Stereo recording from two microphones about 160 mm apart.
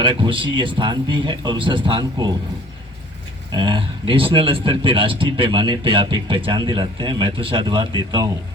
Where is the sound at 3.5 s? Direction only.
30° right (ahead or behind).